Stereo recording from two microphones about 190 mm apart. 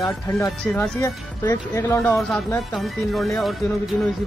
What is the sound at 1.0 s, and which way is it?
Speech, 15° left (ahead or behind).